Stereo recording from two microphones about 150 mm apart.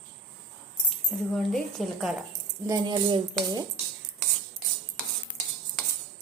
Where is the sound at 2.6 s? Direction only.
30° right (ahead or behind).